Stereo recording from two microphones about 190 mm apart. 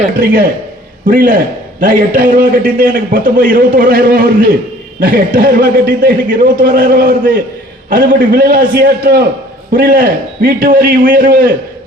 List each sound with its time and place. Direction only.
1.0 s a man's voice: 45° right (ahead or behind)